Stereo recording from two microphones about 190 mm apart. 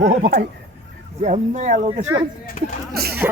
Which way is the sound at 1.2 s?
40° right (ahead or behind).